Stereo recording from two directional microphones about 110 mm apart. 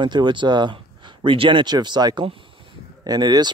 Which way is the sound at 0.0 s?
45° right (ahead or behind).